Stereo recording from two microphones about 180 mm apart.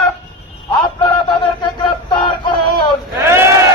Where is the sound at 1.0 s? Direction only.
25° left (ahead or behind).